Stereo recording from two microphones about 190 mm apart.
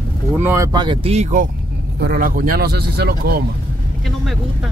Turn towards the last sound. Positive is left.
turn(degrees=-55)  # may be behind; listen again after turning